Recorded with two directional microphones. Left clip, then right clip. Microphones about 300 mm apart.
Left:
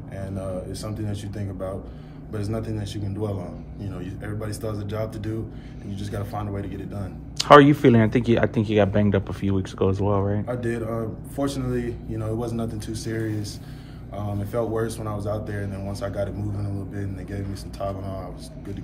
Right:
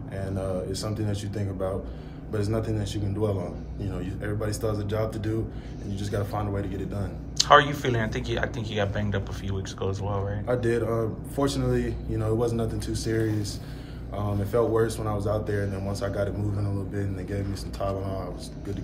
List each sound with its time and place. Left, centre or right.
0.2 s speech: centre
7.3 s speech: left
10.4 s speech: centre